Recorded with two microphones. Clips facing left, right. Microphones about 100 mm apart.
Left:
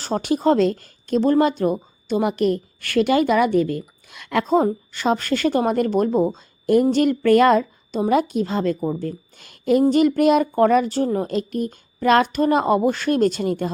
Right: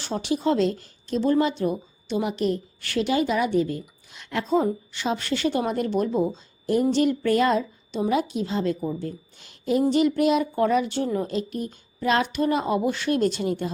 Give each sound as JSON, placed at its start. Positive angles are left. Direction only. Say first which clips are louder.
{"t": 0.0, "sound": "speech", "louder": "left 5 dB", "side_deg": 45}
{"t": 4.4, "sound": "a woman's voice", "louder": "left 3 dB", "side_deg": 45}